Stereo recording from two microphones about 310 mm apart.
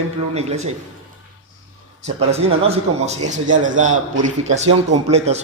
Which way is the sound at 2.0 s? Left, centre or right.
Right.